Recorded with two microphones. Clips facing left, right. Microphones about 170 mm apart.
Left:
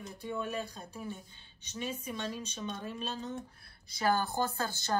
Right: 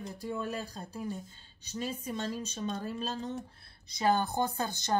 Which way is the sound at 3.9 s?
20° right (ahead or behind).